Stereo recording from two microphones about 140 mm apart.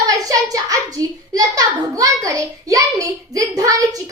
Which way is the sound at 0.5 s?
25° right (ahead or behind).